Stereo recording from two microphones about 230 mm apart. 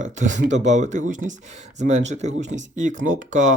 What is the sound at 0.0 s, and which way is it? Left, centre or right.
Speech, right.